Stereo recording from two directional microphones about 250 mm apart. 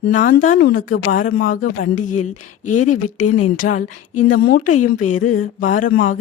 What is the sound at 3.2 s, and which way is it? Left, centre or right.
Speech, left.